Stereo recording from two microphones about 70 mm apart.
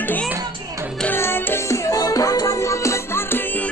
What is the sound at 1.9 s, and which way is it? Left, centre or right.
Music, left.